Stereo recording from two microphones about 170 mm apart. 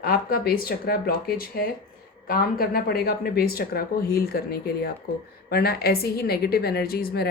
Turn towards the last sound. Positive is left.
turn(degrees=65)  # may be behind; listen again after turning